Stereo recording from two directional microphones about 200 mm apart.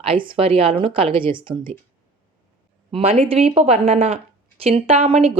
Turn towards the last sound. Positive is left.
turn(degrees=-30)  # may be behind; listen again after turning